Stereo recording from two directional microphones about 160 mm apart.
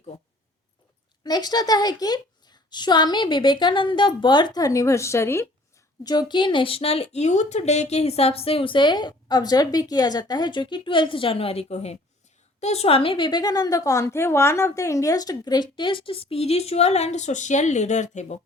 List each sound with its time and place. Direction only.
1.2 s a woman's voice: 25° left (ahead or behind); by 18.3 s 45° left (ahead or behind)